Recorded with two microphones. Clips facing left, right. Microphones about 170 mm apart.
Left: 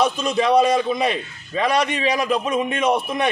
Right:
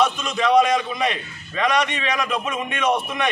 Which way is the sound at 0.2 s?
30° left (ahead or behind).